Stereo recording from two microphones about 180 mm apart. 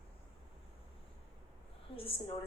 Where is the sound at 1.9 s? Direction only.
30° left (ahead or behind).